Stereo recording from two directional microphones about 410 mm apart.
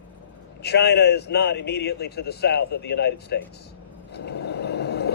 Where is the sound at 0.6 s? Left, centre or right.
Left.